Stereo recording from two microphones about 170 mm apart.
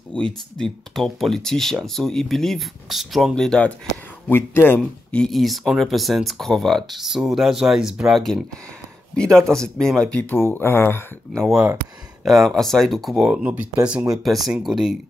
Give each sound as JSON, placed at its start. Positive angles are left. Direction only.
{"t": 0.1, "sound": "speech", "side_deg": 5}
{"t": 11.3, "sound": "speech", "side_deg": 0}